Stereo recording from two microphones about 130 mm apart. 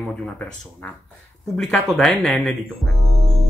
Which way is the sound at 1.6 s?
5° left (ahead or behind).